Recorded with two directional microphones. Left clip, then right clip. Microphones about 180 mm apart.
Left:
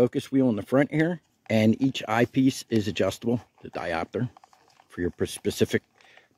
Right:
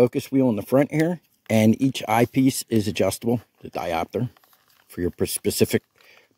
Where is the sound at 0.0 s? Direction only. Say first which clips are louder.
Right 4 dB; 20° right (ahead or behind).